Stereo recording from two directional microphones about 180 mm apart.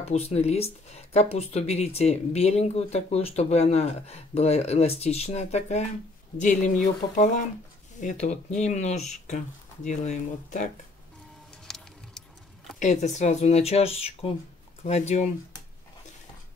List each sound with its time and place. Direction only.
0.0 s speech: 35° left (ahead or behind)
11.6 s music: centre (ahead or behind)
12.7 s speech: 40° left (ahead or behind)